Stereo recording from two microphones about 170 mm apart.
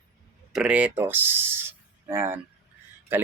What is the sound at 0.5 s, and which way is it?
Speech, 5° right (ahead or behind).